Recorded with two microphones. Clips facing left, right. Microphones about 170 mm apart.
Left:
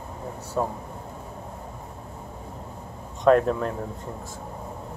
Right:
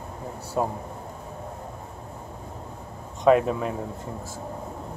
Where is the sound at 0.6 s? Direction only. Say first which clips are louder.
Right 1 dB; 15° right (ahead or behind).